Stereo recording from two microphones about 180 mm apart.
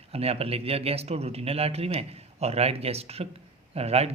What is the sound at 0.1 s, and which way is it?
Speech, 35° right (ahead or behind).